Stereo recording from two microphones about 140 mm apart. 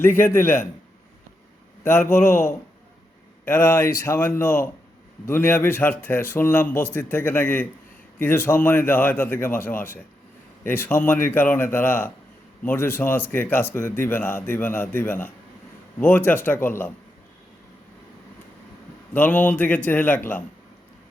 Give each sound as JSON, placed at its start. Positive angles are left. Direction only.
{"t": 0.2, "sound": "a man's voice", "side_deg": 15}
{"t": 1.8, "sound": "a man's voice", "side_deg": 15}
{"t": 19.1, "sound": "a man's voice", "side_deg": 15}